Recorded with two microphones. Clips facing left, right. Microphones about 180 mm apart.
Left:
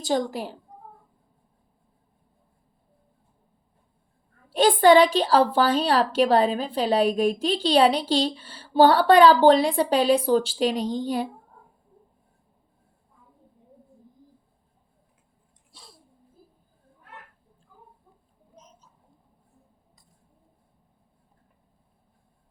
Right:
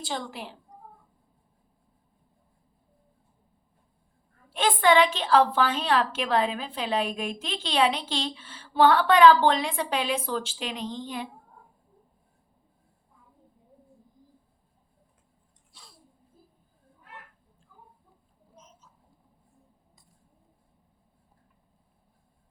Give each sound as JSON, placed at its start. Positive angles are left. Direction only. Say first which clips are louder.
{"t": 0.0, "sound": "a woman's voice", "louder": "left 9 dB", "side_deg": 40}
{"t": 4.4, "sound": "a woman's voice", "louder": "left 6 dB", "side_deg": 35}